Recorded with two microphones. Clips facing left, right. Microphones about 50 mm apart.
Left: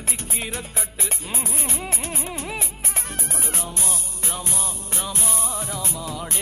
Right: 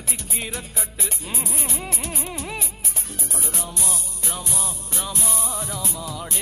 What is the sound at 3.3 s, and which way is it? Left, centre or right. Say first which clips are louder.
Music: even; left.